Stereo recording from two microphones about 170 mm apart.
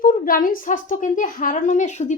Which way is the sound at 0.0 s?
55° left (ahead or behind).